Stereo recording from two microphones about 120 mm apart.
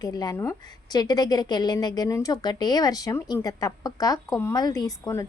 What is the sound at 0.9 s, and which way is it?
Speech, 35° left (ahead or behind).